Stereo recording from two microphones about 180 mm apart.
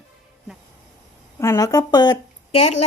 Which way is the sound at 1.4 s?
15° left (ahead or behind).